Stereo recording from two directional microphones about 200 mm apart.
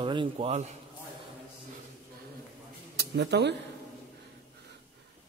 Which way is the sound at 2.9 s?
55° right (ahead or behind).